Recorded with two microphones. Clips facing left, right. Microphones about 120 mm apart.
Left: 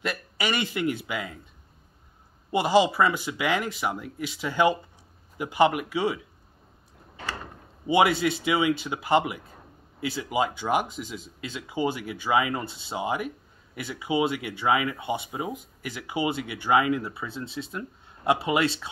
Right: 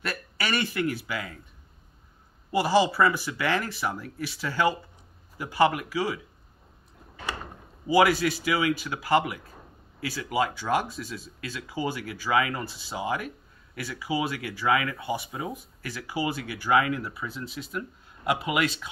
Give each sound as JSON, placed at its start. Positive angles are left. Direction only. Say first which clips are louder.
{"t": 0.0, "sound": "speech", "louder": "left 2 dB", "side_deg": 20}
{"t": 2.5, "sound": "speech", "louder": "left 1 dB", "side_deg": 20}
{"t": 7.8, "sound": "speech", "louder": "even", "side_deg": 20}